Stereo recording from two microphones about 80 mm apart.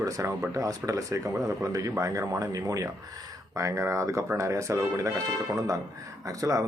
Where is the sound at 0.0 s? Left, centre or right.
Right.